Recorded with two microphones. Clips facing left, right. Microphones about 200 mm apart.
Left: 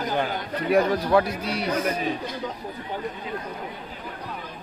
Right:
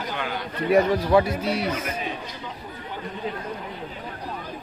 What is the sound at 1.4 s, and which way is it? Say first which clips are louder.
Speech: right 1 dB; 5° right (ahead or behind).